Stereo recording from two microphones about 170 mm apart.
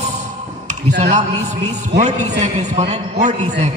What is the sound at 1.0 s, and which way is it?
A man's voice, 40° right (ahead or behind).